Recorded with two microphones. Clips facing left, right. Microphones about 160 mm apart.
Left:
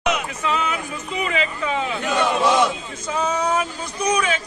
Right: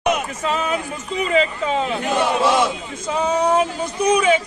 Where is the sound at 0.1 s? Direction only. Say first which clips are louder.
Right 2 dB; 40° right (ahead or behind).